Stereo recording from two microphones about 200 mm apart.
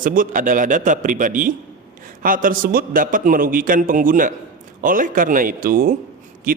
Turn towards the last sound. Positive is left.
turn(degrees=-45)  # may be behind; listen again after turning